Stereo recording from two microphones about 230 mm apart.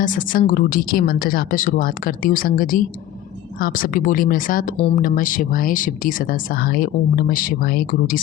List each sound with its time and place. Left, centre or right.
0.0 s speech: left